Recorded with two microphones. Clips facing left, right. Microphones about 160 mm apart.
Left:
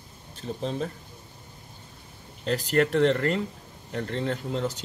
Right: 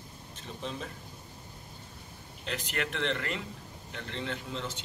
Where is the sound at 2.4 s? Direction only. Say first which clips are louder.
Left 12 dB; 40° left (ahead or behind).